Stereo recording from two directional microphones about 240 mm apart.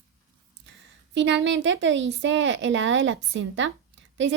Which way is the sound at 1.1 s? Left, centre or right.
Right.